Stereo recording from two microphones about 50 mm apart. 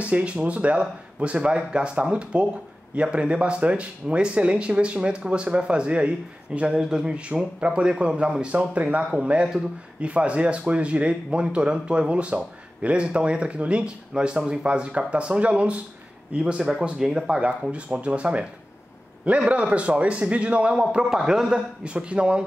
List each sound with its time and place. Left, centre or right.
0.0 s speech: right
6.7 s speech: centre
20.7 s a man's voice: centre
21.5 s speech: right